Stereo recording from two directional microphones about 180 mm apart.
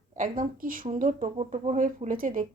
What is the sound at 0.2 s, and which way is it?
Speech, 50° right (ahead or behind).